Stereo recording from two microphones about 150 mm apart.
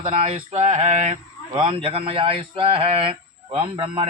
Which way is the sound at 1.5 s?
40° right (ahead or behind).